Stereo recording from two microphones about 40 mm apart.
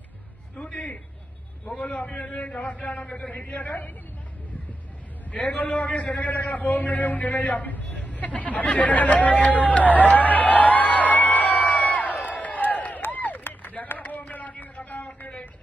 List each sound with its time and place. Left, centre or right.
0.6 s a man's voice: left
5.3 s a man's voice: left
5.6 s a sound: left